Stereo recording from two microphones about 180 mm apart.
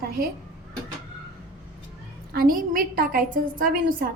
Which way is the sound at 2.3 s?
55° right (ahead or behind).